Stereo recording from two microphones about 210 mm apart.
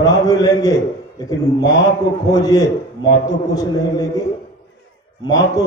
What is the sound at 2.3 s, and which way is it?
Speech, 20° left (ahead or behind).